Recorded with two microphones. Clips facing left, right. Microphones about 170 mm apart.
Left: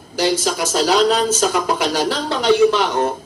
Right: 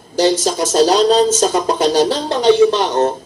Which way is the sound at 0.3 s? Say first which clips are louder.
Right 3 dB; 25° right (ahead or behind).